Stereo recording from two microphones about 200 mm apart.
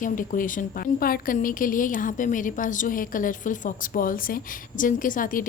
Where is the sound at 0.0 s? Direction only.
40° left (ahead or behind).